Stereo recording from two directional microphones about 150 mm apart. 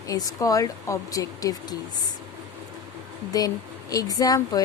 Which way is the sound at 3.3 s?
25° left (ahead or behind).